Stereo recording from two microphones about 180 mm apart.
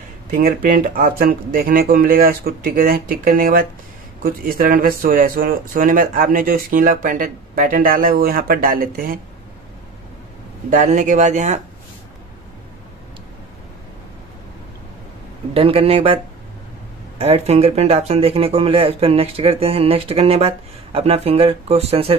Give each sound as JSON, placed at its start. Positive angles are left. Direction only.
{"t": 0.3, "sound": "speech", "side_deg": -50}
{"t": 10.7, "sound": "speech", "side_deg": -45}
{"t": 15.5, "sound": "speech", "side_deg": -30}
{"t": 17.2, "sound": "speech", "side_deg": -35}